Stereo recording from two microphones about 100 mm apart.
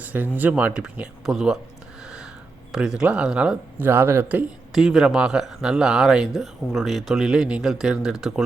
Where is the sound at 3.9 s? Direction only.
25° right (ahead or behind).